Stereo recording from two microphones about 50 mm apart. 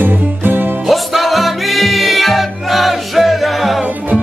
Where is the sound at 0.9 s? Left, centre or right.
Centre.